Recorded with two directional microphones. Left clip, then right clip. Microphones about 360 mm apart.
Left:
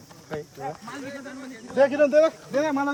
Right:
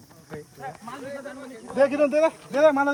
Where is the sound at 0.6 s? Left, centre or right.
Right.